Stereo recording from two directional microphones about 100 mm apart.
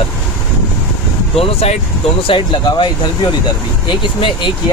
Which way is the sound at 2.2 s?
55° left (ahead or behind).